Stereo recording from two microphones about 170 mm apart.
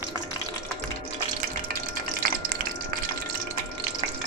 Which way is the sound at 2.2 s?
55° right (ahead or behind).